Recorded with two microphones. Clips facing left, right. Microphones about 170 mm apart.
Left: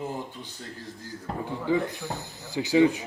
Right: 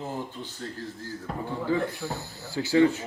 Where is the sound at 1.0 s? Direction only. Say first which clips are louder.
Left 4 dB; 15° left (ahead or behind).